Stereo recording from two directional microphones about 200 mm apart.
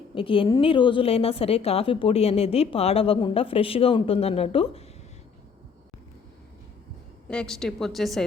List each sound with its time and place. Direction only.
0.1 s a woman's voice: 25° left (ahead or behind)
7.3 s a woman's voice: 5° left (ahead or behind)